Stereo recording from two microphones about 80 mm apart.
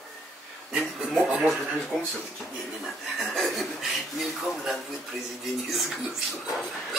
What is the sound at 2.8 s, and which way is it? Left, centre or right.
Speech, centre.